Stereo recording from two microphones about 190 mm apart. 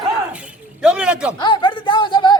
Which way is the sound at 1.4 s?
25° left (ahead or behind).